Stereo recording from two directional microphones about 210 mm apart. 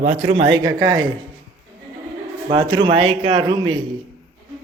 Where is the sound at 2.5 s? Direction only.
20° right (ahead or behind).